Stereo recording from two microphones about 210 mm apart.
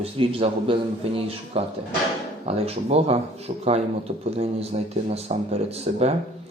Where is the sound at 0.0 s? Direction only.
25° right (ahead or behind).